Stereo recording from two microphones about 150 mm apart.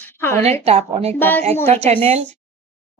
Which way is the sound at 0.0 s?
15° left (ahead or behind).